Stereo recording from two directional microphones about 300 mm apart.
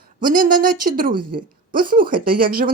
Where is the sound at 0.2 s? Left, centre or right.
Right.